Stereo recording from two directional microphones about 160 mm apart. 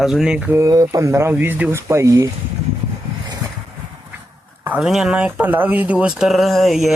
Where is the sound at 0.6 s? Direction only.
20° right (ahead or behind).